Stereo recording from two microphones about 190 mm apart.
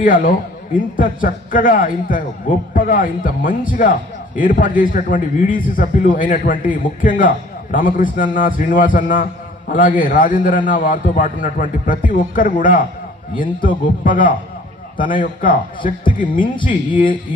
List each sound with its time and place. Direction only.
0.0 s a man's voice: 45° left (ahead or behind)